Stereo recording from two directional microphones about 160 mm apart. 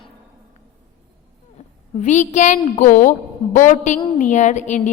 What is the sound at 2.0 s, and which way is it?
A woman's voice, 45° left (ahead or behind).